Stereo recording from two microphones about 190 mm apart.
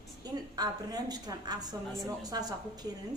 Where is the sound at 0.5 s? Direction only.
20° right (ahead or behind).